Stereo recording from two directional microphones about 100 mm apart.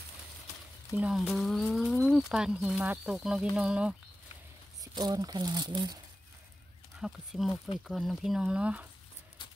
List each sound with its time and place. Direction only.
1.1 s speech: centre (ahead or behind)
4.9 s speech: 40° right (ahead or behind)
7.0 s speech: centre (ahead or behind)